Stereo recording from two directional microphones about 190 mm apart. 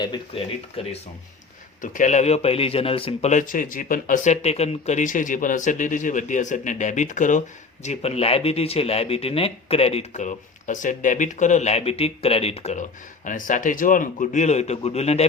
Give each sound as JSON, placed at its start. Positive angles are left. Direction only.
{"t": 0.0, "sound": "speech", "side_deg": 25}
{"t": 1.8, "sound": "speech", "side_deg": 45}